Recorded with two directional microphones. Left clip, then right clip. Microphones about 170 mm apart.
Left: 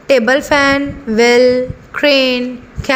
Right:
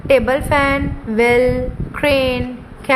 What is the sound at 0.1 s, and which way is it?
A woman's voice, 25° left (ahead or behind).